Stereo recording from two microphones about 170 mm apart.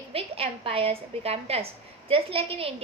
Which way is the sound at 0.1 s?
35° right (ahead or behind).